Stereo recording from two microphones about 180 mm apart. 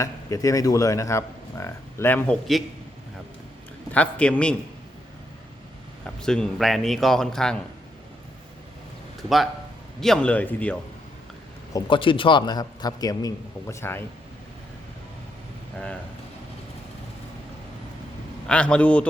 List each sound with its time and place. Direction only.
0.0 s speech: 15° left (ahead or behind)
3.9 s speech: 5° left (ahead or behind)
6.1 s a man's voice: 5° left (ahead or behind)
10.0 s speech: 5° left (ahead or behind)
11.7 s a man's voice: 30° left (ahead or behind)
18.4 s speech: 5° left (ahead or behind)